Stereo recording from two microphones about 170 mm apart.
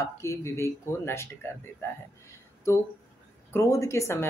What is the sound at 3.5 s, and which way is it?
Speech, 15° left (ahead or behind).